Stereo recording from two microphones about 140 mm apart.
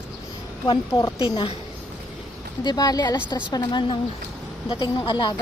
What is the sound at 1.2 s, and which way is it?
Speech, 35° left (ahead or behind).